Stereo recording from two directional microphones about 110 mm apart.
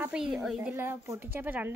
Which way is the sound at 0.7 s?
20° right (ahead or behind).